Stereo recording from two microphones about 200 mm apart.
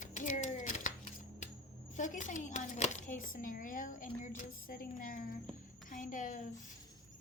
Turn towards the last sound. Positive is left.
turn(degrees=40)  # may be behind; listen again after turning